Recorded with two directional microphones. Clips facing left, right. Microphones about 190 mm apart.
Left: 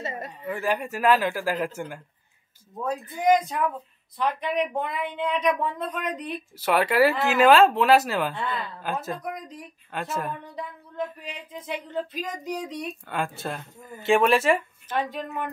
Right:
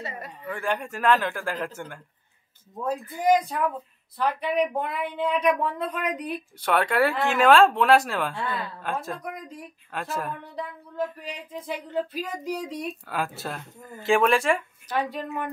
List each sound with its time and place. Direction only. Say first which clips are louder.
0.0 s speech: left 3 dB; 25° left (ahead or behind)
0.5 s a man's voice: left 2 dB; 5° left (ahead or behind)
2.8 s a woman's voice: even; 5° right (ahead or behind)
6.6 s speech: left 2 dB; 5° left (ahead or behind)